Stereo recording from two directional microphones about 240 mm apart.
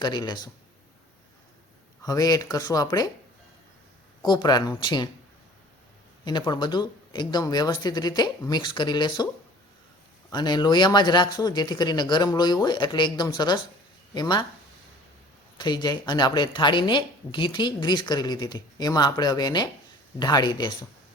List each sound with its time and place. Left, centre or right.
0.0 s a woman's voice: centre
2.0 s a woman's voice: centre
4.3 s a woman's voice: centre
6.2 s a woman's voice: centre
10.2 s a woman's voice: centre
15.5 s a woman's voice: centre